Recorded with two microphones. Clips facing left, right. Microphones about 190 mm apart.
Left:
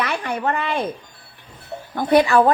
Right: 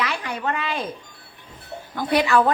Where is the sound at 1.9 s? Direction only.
50° left (ahead or behind).